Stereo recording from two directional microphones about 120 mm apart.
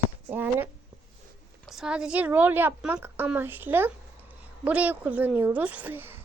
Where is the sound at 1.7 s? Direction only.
5° right (ahead or behind).